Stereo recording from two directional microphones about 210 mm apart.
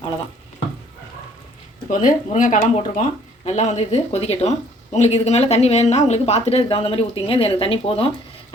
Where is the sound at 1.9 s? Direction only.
35° left (ahead or behind).